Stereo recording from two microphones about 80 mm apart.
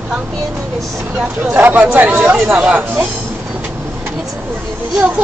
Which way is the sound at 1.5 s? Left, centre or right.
Right.